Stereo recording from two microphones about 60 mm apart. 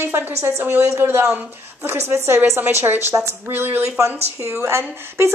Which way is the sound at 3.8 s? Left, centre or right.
Right.